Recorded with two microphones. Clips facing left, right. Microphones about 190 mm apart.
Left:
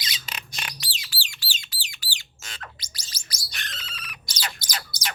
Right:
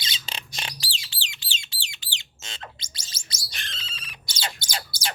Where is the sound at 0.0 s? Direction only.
30° right (ahead or behind).